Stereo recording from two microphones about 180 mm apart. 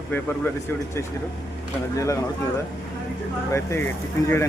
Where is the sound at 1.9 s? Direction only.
15° left (ahead or behind).